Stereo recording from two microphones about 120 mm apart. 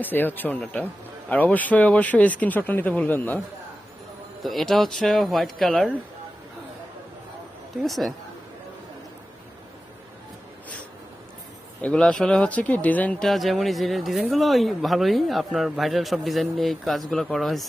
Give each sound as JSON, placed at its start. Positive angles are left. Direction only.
{"t": 0.0, "sound": "speech", "side_deg": 15}
{"t": 4.4, "sound": "speech", "side_deg": 0}
{"t": 7.8, "sound": "speech", "side_deg": 0}
{"t": 11.8, "sound": "speech", "side_deg": 10}